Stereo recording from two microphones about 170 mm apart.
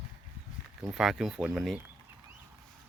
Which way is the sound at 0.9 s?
Centre (ahead or behind).